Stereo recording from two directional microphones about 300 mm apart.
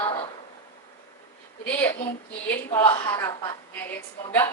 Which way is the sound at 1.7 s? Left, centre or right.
Centre.